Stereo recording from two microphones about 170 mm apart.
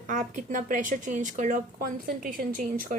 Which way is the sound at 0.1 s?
50° right (ahead or behind).